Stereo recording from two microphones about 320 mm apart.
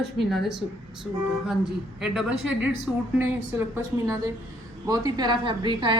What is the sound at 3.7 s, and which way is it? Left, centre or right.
A woman's voice, centre.